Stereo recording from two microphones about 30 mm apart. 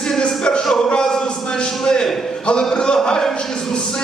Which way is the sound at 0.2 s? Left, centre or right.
Left.